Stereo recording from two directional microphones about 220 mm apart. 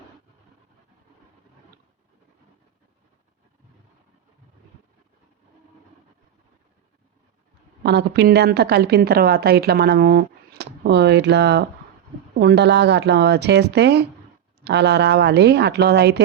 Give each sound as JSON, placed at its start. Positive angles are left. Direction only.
{"t": 7.9, "sound": "a woman's voice", "side_deg": -50}